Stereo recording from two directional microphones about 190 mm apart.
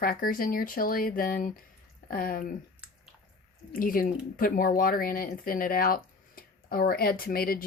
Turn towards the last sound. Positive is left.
turn(degrees=50)  # may be behind; listen again after turning